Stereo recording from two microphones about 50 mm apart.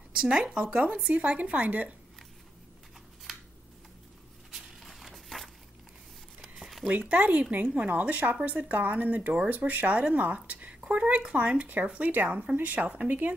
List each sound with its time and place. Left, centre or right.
0.1 s speech: centre; by 2.0 s right
4.5 s a sound: centre
6.8 s speech: right